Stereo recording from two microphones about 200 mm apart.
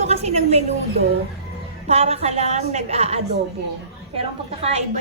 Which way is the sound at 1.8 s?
30° right (ahead or behind).